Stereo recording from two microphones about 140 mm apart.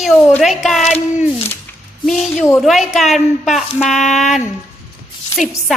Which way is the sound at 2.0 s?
5° left (ahead or behind).